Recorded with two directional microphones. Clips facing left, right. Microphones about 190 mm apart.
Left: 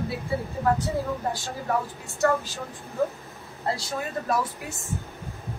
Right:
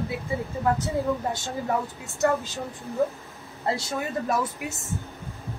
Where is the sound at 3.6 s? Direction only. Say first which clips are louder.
Right 2 dB; 25° right (ahead or behind).